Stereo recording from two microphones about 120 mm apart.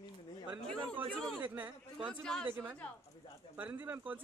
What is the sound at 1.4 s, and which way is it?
Speech, 15° right (ahead or behind).